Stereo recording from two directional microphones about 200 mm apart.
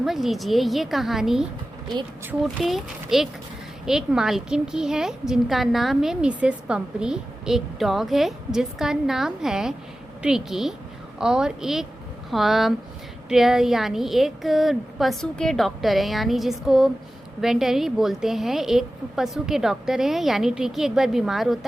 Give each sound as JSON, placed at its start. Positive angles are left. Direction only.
{"t": 0.0, "sound": "a woman's voice", "side_deg": 0}